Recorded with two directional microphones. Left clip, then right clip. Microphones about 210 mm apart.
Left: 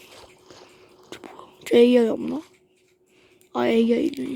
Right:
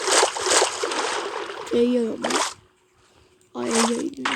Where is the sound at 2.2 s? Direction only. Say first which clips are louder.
Right 9 dB; 50° right (ahead or behind).